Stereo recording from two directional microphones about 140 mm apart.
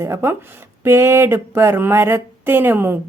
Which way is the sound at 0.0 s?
20° right (ahead or behind).